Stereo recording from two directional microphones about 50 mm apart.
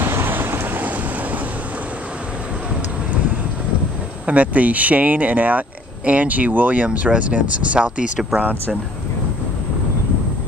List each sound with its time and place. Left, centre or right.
0.0 s thunder: right
4.3 s speech: right